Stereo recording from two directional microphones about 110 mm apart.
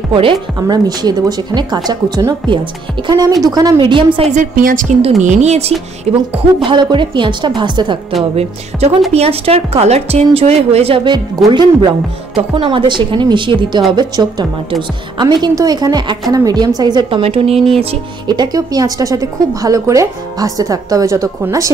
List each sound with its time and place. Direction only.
0.1 s a woman's voice: 50° right (ahead or behind)
0.6 s a woman's voice: 40° right (ahead or behind)
3.1 s speech: 35° right (ahead or behind)
3.7 s a woman's voice: 50° right (ahead or behind)
4.9 s a woman's voice: 90° right
6.6 s a woman's voice: 45° right (ahead or behind)
8.4 s a woman's voice: 70° right (ahead or behind)
11.1 s a woman's voice: 45° right (ahead or behind)
14.2 s speech: 35° right (ahead or behind)
14.7 s a woman's voice: 45° right (ahead or behind)
17.2 s speech: 60° right (ahead or behind)
18.2 s speech: 40° right (ahead or behind)